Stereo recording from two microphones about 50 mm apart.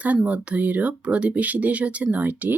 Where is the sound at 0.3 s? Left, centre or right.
Right.